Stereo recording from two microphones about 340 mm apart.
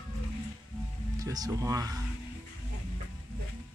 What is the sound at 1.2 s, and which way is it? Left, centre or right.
Speech, centre.